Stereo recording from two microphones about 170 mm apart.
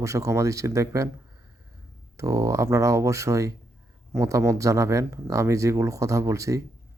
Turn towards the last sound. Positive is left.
turn(degrees=-20)  # may be behind; listen again after turning